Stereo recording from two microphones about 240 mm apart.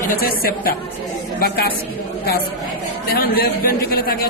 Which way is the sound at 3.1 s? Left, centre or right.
Left.